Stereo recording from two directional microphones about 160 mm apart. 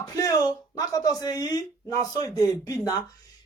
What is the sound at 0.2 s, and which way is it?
Speech, 25° left (ahead or behind).